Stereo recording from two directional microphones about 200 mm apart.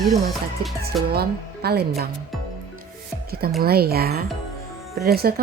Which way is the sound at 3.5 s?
50° right (ahead or behind).